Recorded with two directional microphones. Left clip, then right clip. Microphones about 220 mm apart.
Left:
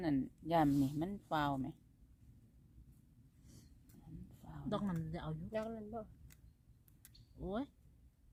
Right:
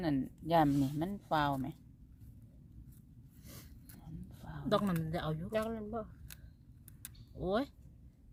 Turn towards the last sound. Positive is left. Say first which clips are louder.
# right 9 dB
turn(degrees=-40)  # may be behind; listen again after turning